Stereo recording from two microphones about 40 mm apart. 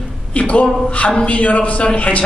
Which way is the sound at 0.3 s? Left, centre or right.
Left.